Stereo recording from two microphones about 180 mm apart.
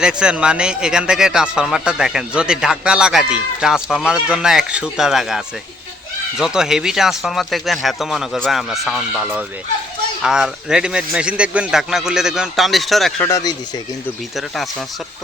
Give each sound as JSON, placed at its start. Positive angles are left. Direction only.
{"t": 0.0, "sound": "a man's voice", "side_deg": -5}
{"t": 13.2, "sound": "speech", "side_deg": 20}
{"t": 14.3, "sound": "a man's voice", "side_deg": 0}